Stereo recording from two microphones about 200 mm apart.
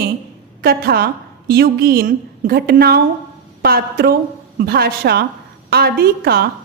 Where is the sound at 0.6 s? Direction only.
50° right (ahead or behind).